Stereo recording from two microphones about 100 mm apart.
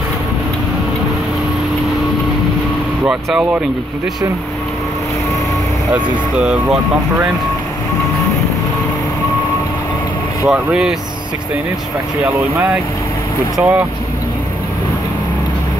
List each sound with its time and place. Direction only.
3.1 s speech: 5° right (ahead or behind)
6.3 s speech: 10° right (ahead or behind)
10.4 s speech: 5° right (ahead or behind)
13.6 s speech: 15° right (ahead or behind)